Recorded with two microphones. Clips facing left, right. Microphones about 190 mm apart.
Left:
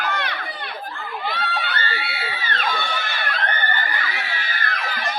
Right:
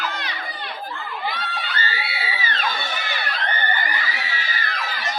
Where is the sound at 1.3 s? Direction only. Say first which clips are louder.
Left 3 dB; 60° left (ahead or behind).